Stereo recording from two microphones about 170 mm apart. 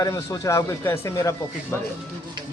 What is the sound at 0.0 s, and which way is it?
Speech, 20° left (ahead or behind).